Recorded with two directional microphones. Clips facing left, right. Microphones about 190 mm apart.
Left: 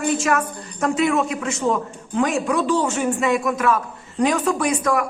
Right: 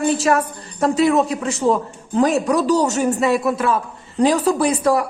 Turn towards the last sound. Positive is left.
turn(degrees=-35)  # may be behind; listen again after turning